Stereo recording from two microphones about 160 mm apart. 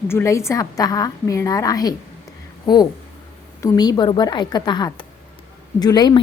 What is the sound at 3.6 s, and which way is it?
A woman's voice, 25° left (ahead or behind).